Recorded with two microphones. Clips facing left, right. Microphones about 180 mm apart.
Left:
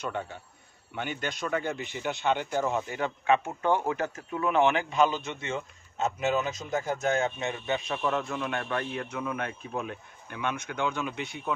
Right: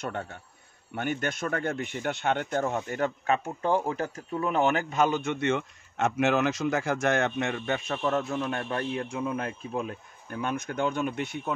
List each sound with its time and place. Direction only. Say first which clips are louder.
0.9 s speech: right 4 dB; 50° right (ahead or behind)
2.9 s speech: left 1 dB; 45° right (ahead or behind)